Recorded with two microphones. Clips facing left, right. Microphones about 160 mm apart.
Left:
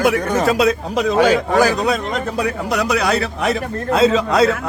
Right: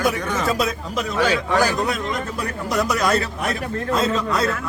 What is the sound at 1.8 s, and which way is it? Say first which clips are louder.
A man's voice: left 4 dB; 80° left.